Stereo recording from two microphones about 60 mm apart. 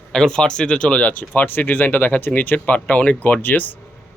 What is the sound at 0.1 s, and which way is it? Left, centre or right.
Speech, centre.